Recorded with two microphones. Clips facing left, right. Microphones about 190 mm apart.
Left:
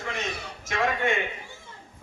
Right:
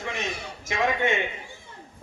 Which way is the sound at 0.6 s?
15° right (ahead or behind).